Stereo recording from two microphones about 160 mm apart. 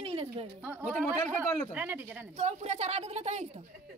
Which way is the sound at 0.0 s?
40° right (ahead or behind).